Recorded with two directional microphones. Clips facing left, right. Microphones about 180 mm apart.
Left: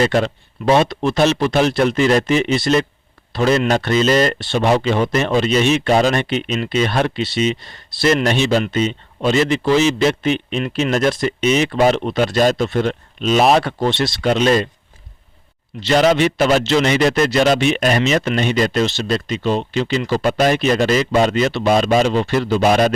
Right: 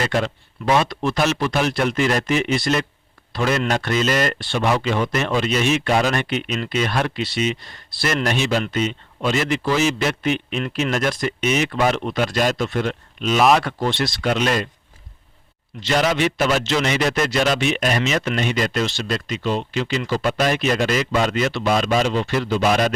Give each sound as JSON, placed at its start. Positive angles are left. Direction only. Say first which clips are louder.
{"t": 0.0, "sound": "a man's voice", "louder": "left 6 dB", "side_deg": 35}
{"t": 15.8, "sound": "speech", "louder": "left 5 dB", "side_deg": 30}
{"t": 20.1, "sound": "speech", "louder": "left 4 dB", "side_deg": 45}